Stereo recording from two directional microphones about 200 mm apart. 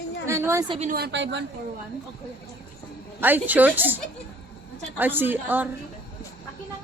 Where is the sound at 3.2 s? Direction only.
10° right (ahead or behind).